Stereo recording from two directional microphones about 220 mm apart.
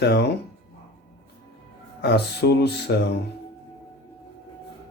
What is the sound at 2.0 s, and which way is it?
Speech, 50° left (ahead or behind).